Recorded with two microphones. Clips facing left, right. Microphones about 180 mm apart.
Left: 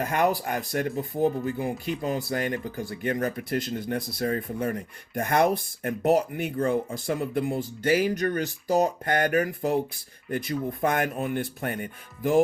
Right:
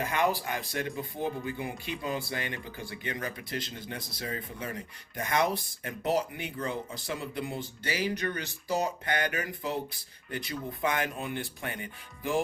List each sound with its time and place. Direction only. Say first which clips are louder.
0.0 s speech: left 4 dB; 45° left (ahead or behind)